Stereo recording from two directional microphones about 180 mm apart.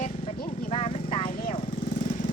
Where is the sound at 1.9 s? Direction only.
45° left (ahead or behind).